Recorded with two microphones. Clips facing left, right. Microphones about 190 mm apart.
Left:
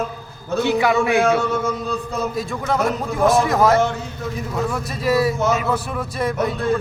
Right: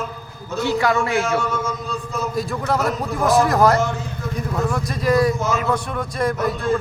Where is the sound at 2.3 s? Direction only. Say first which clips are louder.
Right 2 dB; centre (ahead or behind).